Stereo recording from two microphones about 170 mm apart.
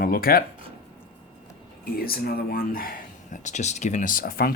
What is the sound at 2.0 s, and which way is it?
Speech, 60° left (ahead or behind).